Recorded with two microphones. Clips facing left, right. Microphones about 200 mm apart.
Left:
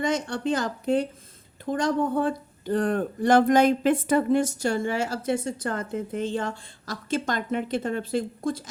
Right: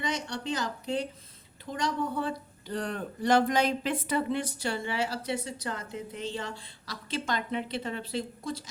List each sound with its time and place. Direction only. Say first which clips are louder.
0.0 s speech: left 7 dB; 50° left (ahead or behind)